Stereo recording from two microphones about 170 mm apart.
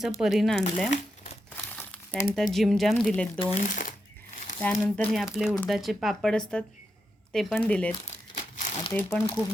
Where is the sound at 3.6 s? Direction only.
50° left (ahead or behind).